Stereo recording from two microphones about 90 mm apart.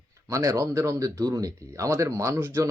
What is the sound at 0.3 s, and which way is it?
Speech, 35° right (ahead or behind).